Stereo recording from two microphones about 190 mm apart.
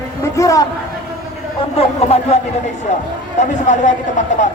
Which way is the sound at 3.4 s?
40° left (ahead or behind).